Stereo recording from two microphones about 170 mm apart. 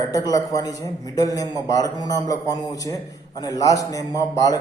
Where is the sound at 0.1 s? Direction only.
20° left (ahead or behind).